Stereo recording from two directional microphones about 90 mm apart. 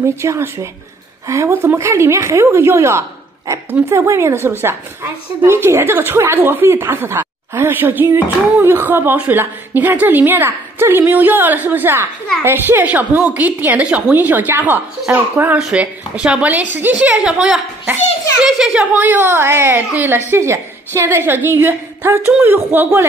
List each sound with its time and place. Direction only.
0.2 s a woman's voice: 30° right (ahead or behind)
1.5 s a woman's voice: 20° right (ahead or behind)
1.8 s a woman's voice: 30° right (ahead or behind); by 18.9 s 5° right (ahead or behind)
18.9 s a woman's voice: 25° right (ahead or behind)